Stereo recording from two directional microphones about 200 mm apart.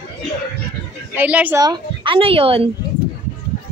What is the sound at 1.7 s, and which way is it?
A woman's voice, 25° right (ahead or behind).